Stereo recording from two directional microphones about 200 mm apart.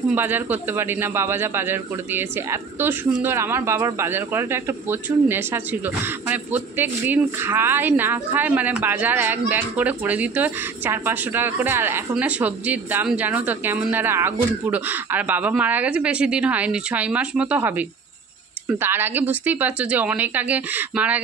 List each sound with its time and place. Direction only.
0.1 s speech: 10° right (ahead or behind)